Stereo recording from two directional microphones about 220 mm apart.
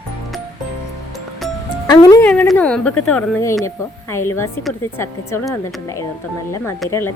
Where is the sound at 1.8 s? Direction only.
15° left (ahead or behind).